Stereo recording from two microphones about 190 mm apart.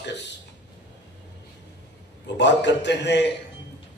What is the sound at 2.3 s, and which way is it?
Speech, 65° left (ahead or behind).